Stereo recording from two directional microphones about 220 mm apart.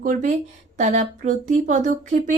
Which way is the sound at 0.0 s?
35° right (ahead or behind).